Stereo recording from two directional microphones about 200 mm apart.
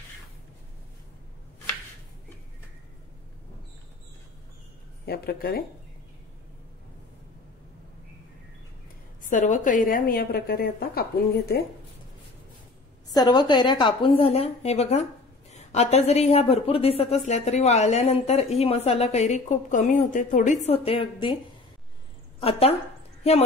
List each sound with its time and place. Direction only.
5.0 s a woman's voice: 50° left (ahead or behind)
9.2 s a woman's voice: 40° left (ahead or behind)
13.1 s a woman's voice: 20° left (ahead or behind)
22.4 s a woman's voice: 30° left (ahead or behind)